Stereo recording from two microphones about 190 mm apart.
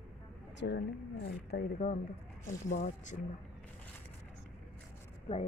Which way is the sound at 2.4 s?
40° left (ahead or behind).